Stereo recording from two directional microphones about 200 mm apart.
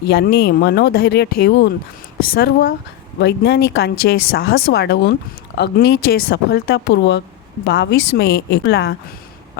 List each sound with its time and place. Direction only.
0.0 s speech: 55° left (ahead or behind)